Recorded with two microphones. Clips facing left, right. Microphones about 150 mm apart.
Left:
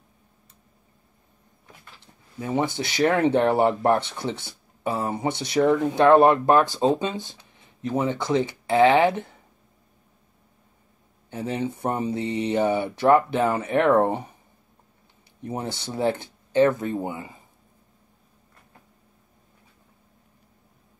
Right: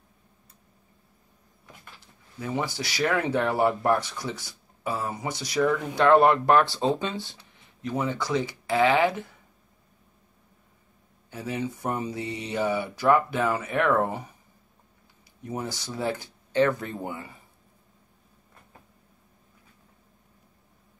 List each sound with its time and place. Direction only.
2.3 s speech: 25° left (ahead or behind)
11.2 s speech: 25° left (ahead or behind)
15.4 s speech: 25° left (ahead or behind)